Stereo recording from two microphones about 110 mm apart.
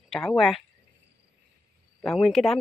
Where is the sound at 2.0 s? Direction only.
5° left (ahead or behind).